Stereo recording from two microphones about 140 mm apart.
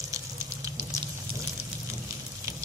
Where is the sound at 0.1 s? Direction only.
25° right (ahead or behind).